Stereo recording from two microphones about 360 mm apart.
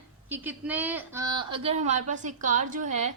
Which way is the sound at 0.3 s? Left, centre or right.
Centre.